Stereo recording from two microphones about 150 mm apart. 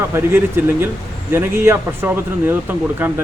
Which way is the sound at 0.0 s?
15° right (ahead or behind).